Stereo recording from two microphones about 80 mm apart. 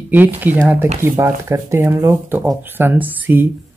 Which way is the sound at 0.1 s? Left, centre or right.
Right.